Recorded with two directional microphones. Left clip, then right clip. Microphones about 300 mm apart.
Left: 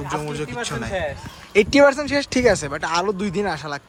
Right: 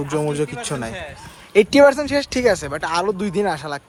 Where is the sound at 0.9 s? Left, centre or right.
Left.